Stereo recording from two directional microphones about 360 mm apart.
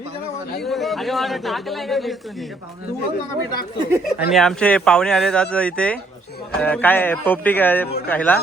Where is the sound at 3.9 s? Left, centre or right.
Centre.